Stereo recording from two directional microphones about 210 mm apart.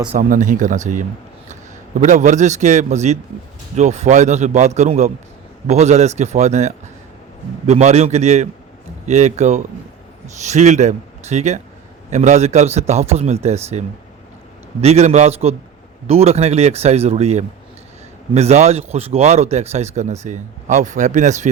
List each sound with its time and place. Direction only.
0.2 s speech: 40° right (ahead or behind)